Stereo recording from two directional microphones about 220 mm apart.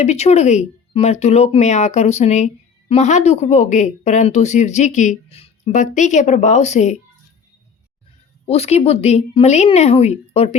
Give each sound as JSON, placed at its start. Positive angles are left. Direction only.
{"t": 0.0, "sound": "speech", "side_deg": 30}
{"t": 8.4, "sound": "a woman's voice", "side_deg": 30}